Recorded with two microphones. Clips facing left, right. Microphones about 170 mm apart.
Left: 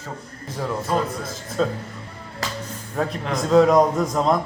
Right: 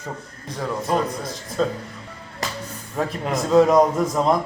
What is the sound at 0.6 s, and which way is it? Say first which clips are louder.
A man's voice: right 1 dB; centre (ahead or behind).